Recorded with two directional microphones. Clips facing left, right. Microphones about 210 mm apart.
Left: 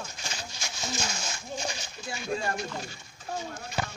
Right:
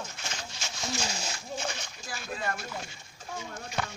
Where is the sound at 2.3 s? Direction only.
30° left (ahead or behind).